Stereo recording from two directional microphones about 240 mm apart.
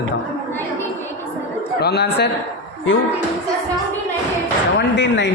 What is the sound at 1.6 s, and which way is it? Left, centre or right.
Speech, left.